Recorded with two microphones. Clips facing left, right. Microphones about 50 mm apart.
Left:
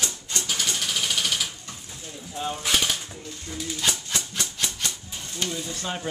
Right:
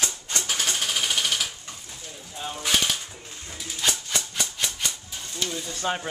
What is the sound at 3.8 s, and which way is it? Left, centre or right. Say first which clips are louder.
Music: right 2 dB; centre.